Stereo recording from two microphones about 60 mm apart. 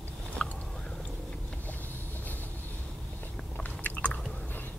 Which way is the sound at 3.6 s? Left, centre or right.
Left.